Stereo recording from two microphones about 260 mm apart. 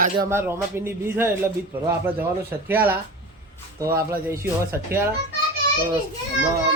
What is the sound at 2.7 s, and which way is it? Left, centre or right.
Speech, centre.